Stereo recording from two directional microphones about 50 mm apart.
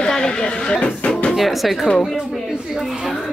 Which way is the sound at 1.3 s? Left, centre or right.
Centre.